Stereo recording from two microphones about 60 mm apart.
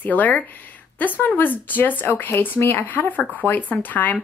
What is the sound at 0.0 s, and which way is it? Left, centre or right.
A woman's voice, left.